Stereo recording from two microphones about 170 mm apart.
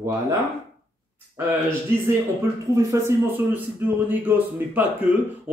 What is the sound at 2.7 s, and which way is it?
Speech, 15° right (ahead or behind).